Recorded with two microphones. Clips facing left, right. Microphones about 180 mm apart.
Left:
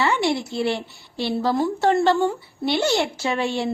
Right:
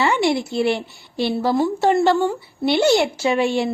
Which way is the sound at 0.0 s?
15° right (ahead or behind).